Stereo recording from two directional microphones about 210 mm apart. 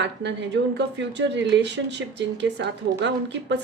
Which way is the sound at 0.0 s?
55° right (ahead or behind).